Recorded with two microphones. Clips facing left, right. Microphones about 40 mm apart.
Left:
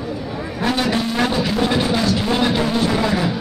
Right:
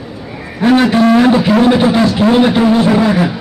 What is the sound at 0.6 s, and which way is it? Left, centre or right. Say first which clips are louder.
A man's voice: right 11 dB; right.